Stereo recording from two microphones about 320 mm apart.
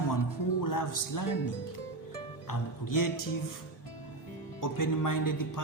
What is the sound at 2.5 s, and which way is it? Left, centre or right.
Speech, left.